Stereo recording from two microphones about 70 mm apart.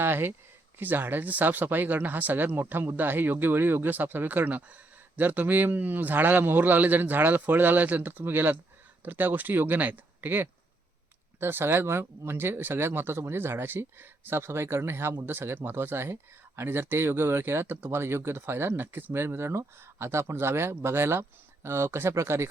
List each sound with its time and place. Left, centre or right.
0.0 s speech: right